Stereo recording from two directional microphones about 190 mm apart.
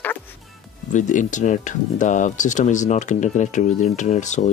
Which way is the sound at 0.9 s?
40° left (ahead or behind).